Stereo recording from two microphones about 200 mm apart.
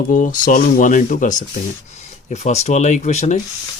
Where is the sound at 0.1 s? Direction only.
40° left (ahead or behind).